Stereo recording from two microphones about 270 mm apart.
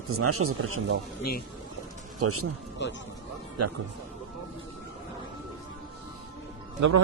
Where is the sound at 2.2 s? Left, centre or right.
Right.